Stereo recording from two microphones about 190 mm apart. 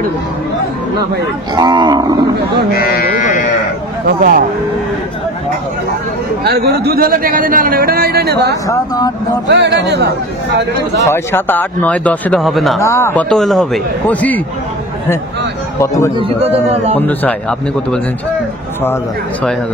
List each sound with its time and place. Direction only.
1.5 s speech: 20° right (ahead or behind)
2.7 s speech: 55° left (ahead or behind)
4.2 s speech: 50° right (ahead or behind)
6.4 s speech: 55° right (ahead or behind)
8.6 s speech: 20° left (ahead or behind)
9.5 s a man's voice: 65° right (ahead or behind)
11.1 s a man's voice: 10° left (ahead or behind)
12.8 s a man's voice: 15° left (ahead or behind)
15.8 s a man's voice: 15° left (ahead or behind)
16.2 s a man's voice: 30° right (ahead or behind)
17.0 s a man's voice: 10° left (ahead or behind)